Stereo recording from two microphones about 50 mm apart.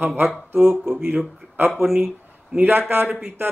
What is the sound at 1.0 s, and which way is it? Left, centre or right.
Speech, right.